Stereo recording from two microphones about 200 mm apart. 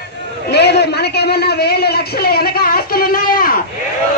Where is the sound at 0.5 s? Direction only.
55° left (ahead or behind).